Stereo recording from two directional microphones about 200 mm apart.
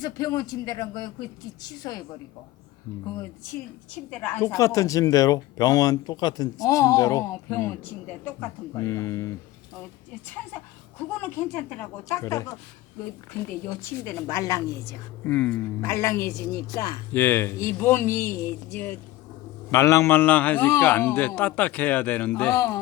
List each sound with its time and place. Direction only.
0.0 s a man's voice: 20° left (ahead or behind)
4.1 s speech: 10° left (ahead or behind)
11.2 s speech: 10° left (ahead or behind)